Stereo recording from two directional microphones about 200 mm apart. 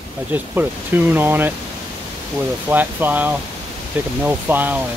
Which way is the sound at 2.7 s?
10° right (ahead or behind).